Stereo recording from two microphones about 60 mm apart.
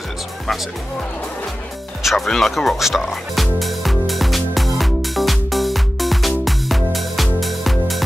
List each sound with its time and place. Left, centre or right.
2.0 s music: centre